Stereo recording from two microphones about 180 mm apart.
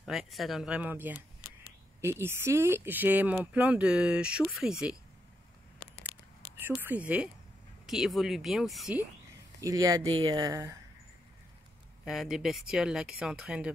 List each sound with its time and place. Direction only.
0.0 s speech: centre (ahead or behind)
6.6 s speech: 10° right (ahead or behind)
9.6 s a woman's voice: 20° right (ahead or behind)
12.0 s speech: centre (ahead or behind)